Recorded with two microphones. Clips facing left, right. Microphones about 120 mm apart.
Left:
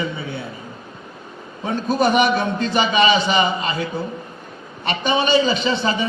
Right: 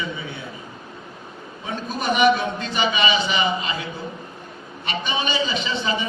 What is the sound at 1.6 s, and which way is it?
A man's voice, 35° left (ahead or behind).